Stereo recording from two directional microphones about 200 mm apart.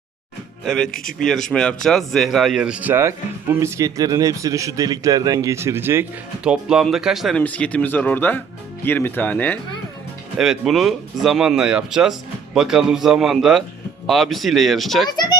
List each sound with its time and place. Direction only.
0.6 s speech: centre (ahead or behind)
0.9 s a man's voice: 45° left (ahead or behind)
1.2 s speech: 5° left (ahead or behind)